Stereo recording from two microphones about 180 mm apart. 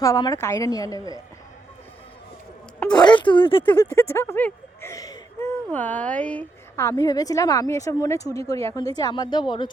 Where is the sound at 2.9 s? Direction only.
25° left (ahead or behind).